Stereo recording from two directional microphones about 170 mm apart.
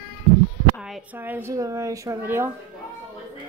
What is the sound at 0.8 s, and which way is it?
Speech, 5° right (ahead or behind).